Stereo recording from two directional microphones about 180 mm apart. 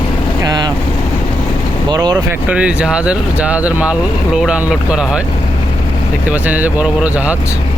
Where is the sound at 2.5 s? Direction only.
5° right (ahead or behind).